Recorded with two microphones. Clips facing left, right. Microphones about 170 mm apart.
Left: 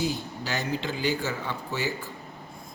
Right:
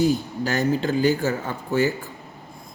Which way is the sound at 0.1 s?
45° right (ahead or behind).